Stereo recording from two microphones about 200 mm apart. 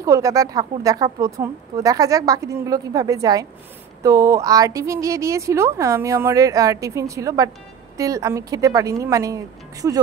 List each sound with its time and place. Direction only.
0.0 s speech: 15° right (ahead or behind)